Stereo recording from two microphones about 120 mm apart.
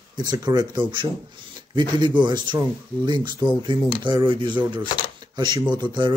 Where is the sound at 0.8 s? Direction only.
45° right (ahead or behind).